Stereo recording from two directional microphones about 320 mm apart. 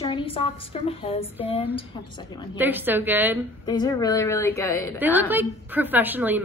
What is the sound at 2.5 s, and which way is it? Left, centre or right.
Speech, centre.